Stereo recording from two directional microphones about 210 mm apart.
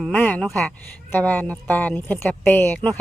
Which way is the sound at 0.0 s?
10° left (ahead or behind).